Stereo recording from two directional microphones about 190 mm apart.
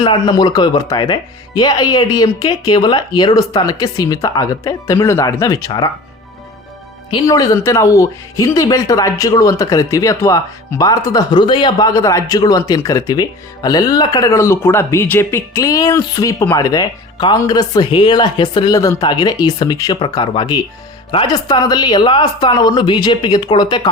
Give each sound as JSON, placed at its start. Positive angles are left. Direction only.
{"t": 0.0, "sound": "speech", "side_deg": 25}
{"t": 7.1, "sound": "speech", "side_deg": 20}